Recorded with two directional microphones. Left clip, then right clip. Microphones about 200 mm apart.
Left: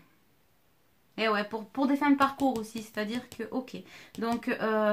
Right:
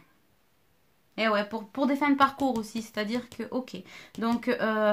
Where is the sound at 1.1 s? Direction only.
35° right (ahead or behind).